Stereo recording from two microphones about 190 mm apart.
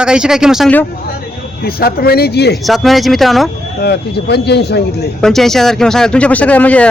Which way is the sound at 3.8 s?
60° left (ahead or behind).